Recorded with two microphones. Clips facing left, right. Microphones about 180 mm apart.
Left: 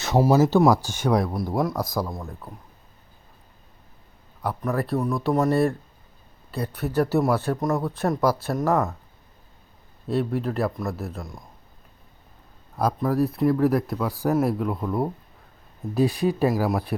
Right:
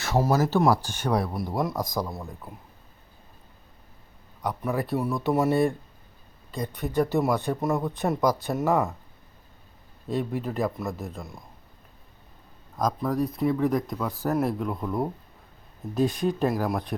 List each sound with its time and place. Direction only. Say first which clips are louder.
0.0 s speech: left 5 dB; 15° left (ahead or behind)
1.2 s speech: left 3 dB; 5° right (ahead or behind)
1.5 s speech: left 3 dB; 5° left (ahead or behind)
2.1 s speech: left 2 dB; 5° right (ahead or behind)
4.6 s speech: left 2 dB; centre (ahead or behind)
8.7 s speech: left 1 dB; 15° right (ahead or behind)
10.1 s speech: left 4 dB; centre (ahead or behind)
12.7 s speech: left 3 dB; 5° left (ahead or behind)